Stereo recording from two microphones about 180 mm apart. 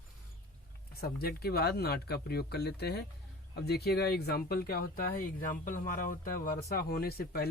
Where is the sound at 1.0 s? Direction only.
60° left (ahead or behind).